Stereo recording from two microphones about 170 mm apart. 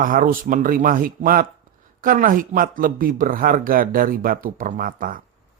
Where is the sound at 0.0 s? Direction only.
55° right (ahead or behind).